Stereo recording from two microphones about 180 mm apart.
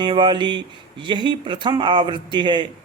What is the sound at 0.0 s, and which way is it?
Speech, 25° right (ahead or behind).